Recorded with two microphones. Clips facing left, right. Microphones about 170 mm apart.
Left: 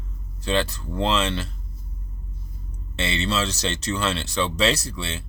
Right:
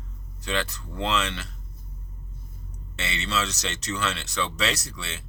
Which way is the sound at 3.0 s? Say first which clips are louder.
Left 5 dB; 30° left (ahead or behind).